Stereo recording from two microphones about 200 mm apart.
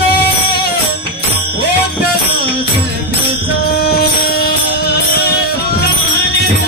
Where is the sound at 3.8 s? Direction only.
50° left (ahead or behind).